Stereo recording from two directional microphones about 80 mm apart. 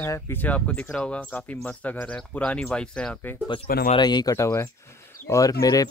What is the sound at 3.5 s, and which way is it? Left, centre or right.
Speech, left.